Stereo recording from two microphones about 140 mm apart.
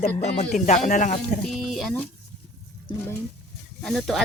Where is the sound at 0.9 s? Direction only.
70° left (ahead or behind).